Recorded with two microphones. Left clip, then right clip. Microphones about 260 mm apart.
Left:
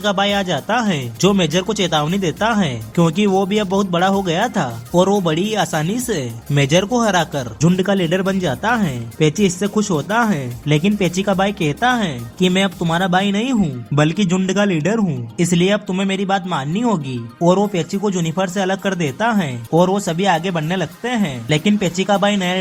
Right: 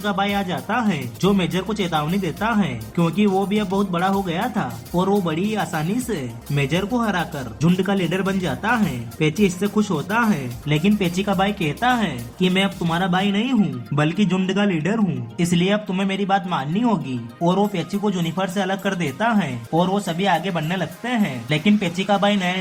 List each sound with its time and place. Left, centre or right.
0.0 s speech: left